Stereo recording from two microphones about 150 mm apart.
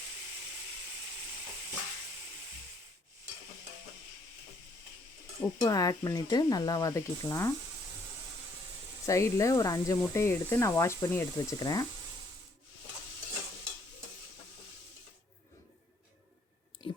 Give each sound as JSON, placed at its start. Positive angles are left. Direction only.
{"t": 5.4, "sound": "speech", "side_deg": 25}
{"t": 9.0, "sound": "speech", "side_deg": 20}
{"t": 16.8, "sound": "a sound", "side_deg": 35}